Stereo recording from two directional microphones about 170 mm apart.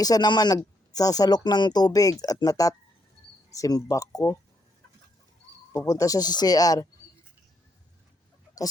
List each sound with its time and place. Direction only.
0.0 s speech: 25° left (ahead or behind)
5.9 s speech: 20° left (ahead or behind)